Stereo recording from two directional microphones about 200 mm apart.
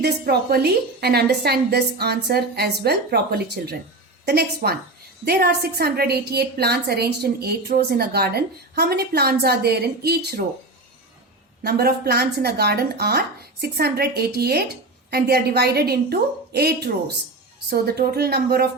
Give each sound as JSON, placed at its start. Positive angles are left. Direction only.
{"t": 0.0, "sound": "a woman's voice", "side_deg": -50}
{"t": 11.6, "sound": "a woman's voice", "side_deg": -50}